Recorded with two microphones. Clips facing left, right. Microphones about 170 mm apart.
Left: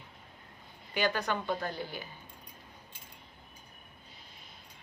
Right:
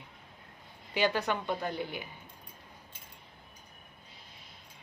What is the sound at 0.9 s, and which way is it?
A woman's voice, 25° right (ahead or behind).